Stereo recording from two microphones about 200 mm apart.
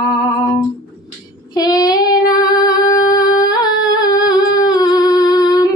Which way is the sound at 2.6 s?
20° left (ahead or behind).